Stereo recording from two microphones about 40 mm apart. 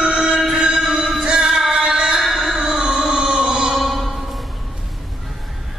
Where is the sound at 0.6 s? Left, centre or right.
Right.